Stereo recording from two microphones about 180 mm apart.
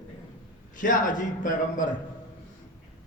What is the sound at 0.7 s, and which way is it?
A man's voice, 45° left (ahead or behind).